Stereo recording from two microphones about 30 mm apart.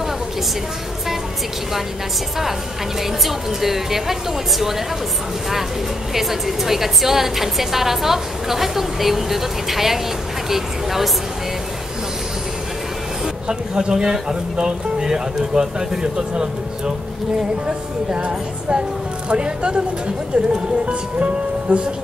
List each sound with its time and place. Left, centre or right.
3.0 s a woman's voice: centre
6.1 s a woman's voice: centre
13.5 s speech: right